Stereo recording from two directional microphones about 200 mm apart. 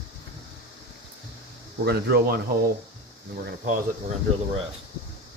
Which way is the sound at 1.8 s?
55° right (ahead or behind).